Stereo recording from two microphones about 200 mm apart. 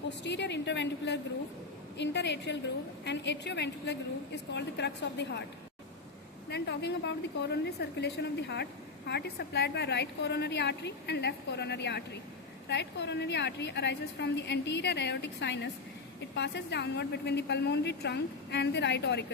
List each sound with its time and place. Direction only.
0.1 s a woman's voice: 60° left (ahead or behind)
6.5 s a woman's voice: 55° left (ahead or behind)